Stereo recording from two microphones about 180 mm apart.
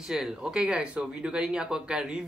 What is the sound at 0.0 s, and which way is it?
Speech, 5° right (ahead or behind).